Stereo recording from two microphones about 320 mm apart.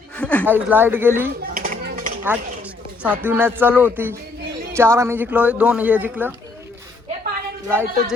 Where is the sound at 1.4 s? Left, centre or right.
Right.